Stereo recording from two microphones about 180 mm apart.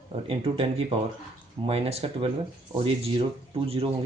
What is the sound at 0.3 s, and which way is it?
Speech, 30° right (ahead or behind).